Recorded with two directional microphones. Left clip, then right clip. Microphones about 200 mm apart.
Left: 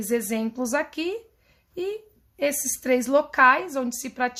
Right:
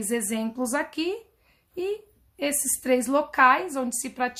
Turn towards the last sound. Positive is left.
turn(degrees=25)  # may be behind; listen again after turning